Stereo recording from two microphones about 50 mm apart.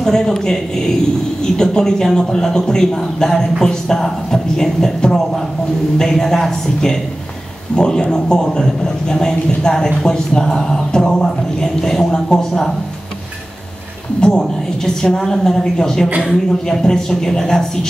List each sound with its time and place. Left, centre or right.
0.0 s speech: centre
14.2 s speech: centre